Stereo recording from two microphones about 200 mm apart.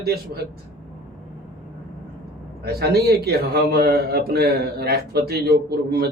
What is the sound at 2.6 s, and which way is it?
A man's voice, 50° right (ahead or behind).